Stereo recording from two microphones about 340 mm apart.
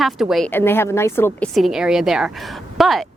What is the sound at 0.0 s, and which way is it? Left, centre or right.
Speech, centre.